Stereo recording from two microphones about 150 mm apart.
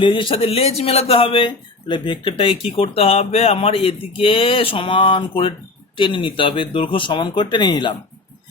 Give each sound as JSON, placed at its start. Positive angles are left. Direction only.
{"t": 0.0, "sound": "speech", "side_deg": 35}